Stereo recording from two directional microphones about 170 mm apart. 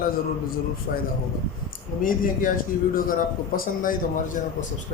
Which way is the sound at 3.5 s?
55° left (ahead or behind).